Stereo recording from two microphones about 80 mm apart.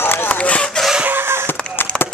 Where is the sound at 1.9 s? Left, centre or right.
Centre.